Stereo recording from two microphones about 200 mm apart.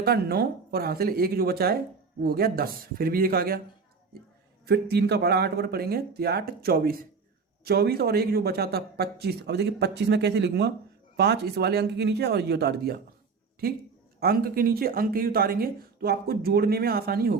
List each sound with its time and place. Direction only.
0.0 s speech: 50° right (ahead or behind)
4.6 s speech: 55° right (ahead or behind)
14.2 s speech: 50° right (ahead or behind)